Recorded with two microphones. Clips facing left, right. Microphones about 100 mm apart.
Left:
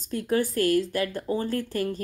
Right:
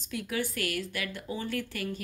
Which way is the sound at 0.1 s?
40° left (ahead or behind).